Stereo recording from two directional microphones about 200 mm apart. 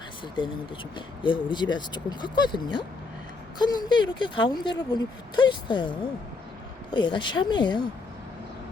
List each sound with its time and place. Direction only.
0.9 s speech: 25° left (ahead or behind)
6.9 s speech: 25° left (ahead or behind)